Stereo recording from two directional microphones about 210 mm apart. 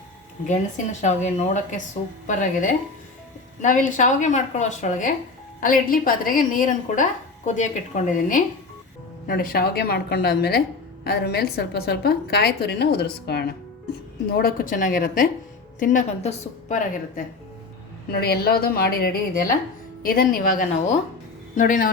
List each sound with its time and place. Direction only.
1.0 s a woman's voice: 35° left (ahead or behind)
18.1 s a woman's voice: 50° left (ahead or behind)